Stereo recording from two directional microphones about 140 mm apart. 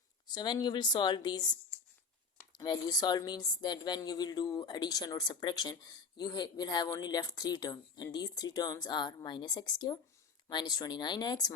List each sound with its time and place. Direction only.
0.3 s a woman's voice: 30° left (ahead or behind)
2.5 s a woman's voice: 30° left (ahead or behind)